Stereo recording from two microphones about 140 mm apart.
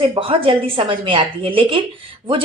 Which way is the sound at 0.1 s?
40° right (ahead or behind).